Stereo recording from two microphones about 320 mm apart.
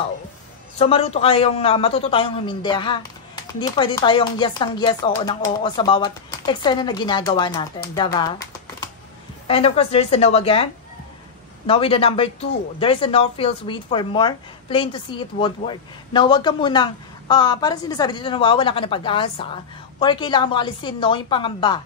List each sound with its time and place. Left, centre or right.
0.7 s a woman's voice: centre
9.5 s a woman's voice: centre